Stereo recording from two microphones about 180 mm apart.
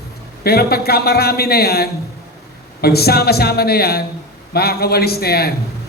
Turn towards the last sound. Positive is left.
turn(degrees=60)  # may be behind; listen again after turning